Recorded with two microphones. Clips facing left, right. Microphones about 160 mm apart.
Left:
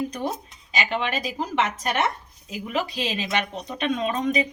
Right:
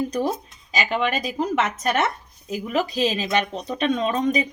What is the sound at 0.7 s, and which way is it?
Speech, 40° right (ahead or behind).